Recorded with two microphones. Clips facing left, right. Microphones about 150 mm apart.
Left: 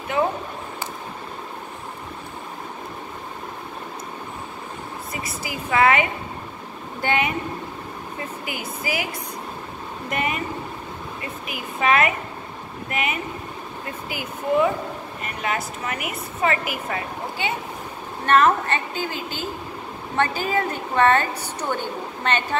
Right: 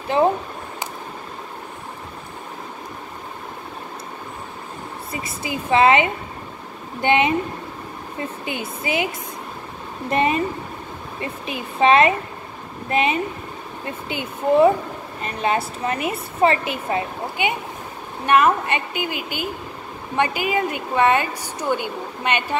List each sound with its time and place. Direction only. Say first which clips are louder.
0.1 s speech: right 5 dB; 30° right (ahead or behind)
5.1 s a woman's voice: right 4 dB; 25° right (ahead or behind)
8.5 s a woman's voice: right 3 dB; 25° right (ahead or behind)